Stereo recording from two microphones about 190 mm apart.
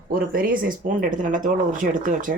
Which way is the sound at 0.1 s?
50° right (ahead or behind).